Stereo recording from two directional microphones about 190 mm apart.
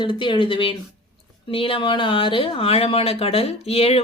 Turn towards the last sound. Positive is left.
turn(degrees=30)  # may be behind; listen again after turning